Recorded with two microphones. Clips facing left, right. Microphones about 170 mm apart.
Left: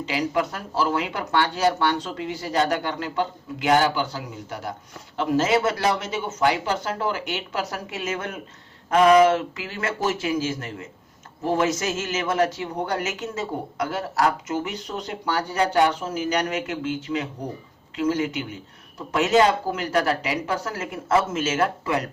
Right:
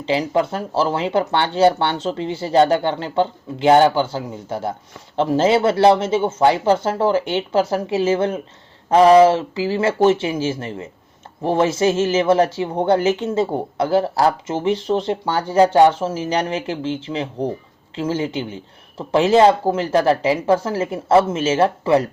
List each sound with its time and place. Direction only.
0.0 s speech: 30° right (ahead or behind)